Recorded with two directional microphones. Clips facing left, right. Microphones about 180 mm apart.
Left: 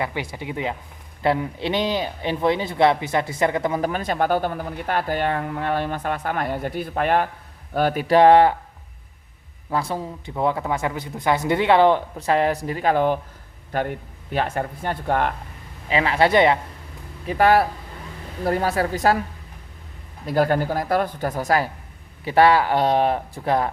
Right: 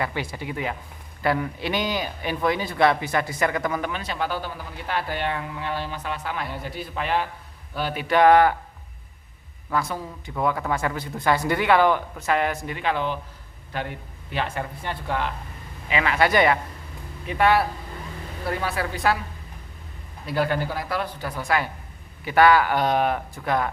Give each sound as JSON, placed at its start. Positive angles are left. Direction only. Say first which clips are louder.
{"t": 0.0, "sound": "a man's voice", "louder": "left 1 dB", "side_deg": 20}
{"t": 9.6, "sound": "a man's voice", "louder": "left 2 dB", "side_deg": 30}
{"t": 15.9, "sound": "a man's voice", "louder": "left 3 dB", "side_deg": 30}
{"t": 17.2, "sound": "speech", "louder": "left 3 dB", "side_deg": 40}
{"t": 20.2, "sound": "speech", "louder": "left 5 dB", "side_deg": 45}